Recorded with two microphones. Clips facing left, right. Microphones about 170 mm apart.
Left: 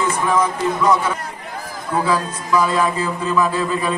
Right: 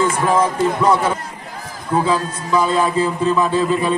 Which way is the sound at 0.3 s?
30° right (ahead or behind).